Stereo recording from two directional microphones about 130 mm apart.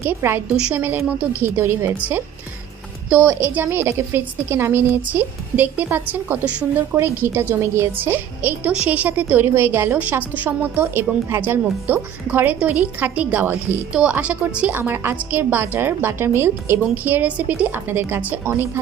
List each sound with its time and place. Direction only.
0.0 s a woman's voice: 20° right (ahead or behind)